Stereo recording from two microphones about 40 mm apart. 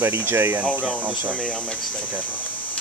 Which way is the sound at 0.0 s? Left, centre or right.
Right.